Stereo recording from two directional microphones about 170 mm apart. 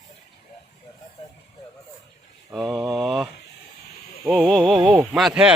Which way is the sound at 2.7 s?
20° right (ahead or behind).